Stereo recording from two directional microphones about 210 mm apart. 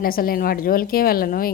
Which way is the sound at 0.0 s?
45° left (ahead or behind).